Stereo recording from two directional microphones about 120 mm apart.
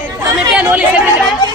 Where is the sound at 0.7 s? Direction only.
10° right (ahead or behind).